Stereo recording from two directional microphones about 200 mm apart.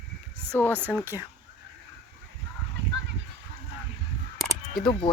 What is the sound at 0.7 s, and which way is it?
Speech, 10° right (ahead or behind).